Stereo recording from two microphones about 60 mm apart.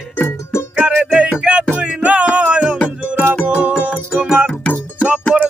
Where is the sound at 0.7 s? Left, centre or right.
Centre.